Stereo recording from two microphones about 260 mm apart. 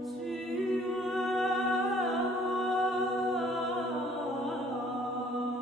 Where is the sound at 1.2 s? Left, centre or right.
Centre.